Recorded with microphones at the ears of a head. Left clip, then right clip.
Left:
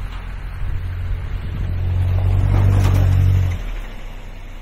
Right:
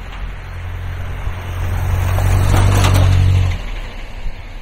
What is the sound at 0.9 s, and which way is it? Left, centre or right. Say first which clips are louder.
Vehicle: right 6 dB; right.